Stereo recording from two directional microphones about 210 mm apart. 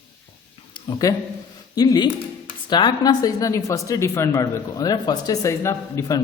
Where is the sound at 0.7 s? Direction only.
20° left (ahead or behind).